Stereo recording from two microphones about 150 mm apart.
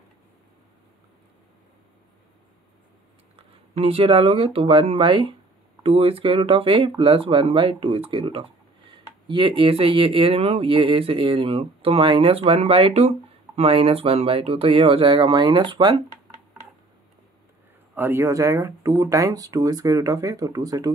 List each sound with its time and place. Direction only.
3.3 s speech: 40° right (ahead or behind)
17.9 s speech: 15° right (ahead or behind)